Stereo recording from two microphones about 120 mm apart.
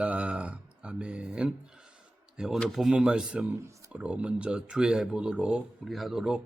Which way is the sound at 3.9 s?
10° right (ahead or behind).